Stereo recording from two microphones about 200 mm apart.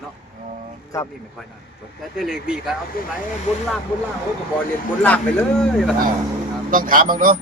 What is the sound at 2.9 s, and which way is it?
Speech, 45° left (ahead or behind).